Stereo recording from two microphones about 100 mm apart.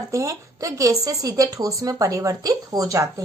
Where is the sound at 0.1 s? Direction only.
30° right (ahead or behind).